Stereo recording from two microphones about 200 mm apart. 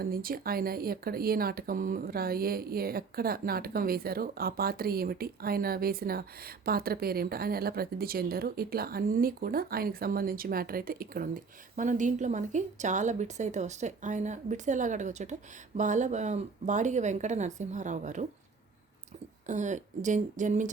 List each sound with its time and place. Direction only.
0.0 s speech: 45° right (ahead or behind)
19.5 s speech: 35° right (ahead or behind)